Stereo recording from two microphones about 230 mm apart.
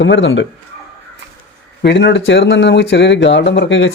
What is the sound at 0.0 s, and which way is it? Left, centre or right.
Speech, left.